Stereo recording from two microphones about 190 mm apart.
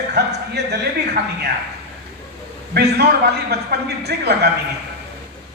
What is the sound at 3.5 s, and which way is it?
Speech, 60° right (ahead or behind).